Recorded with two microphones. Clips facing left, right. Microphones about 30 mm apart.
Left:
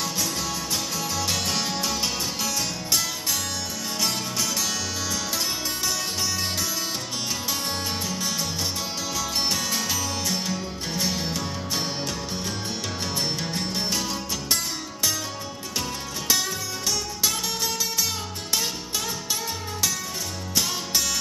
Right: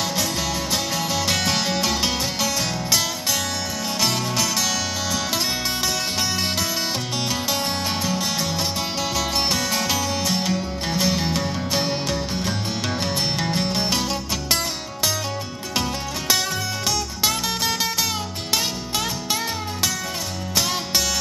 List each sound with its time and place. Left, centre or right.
0.9 s music: right
8.0 s music: right
16.8 s music: right